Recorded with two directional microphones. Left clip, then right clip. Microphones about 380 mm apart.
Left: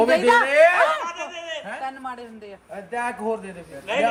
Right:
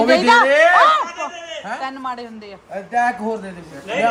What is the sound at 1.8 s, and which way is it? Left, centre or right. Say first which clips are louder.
Speech: right 5 dB; right.